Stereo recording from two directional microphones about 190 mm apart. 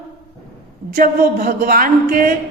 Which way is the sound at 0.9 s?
50° right (ahead or behind).